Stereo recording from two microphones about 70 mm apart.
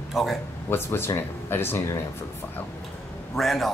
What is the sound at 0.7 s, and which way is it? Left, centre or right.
Speech, left.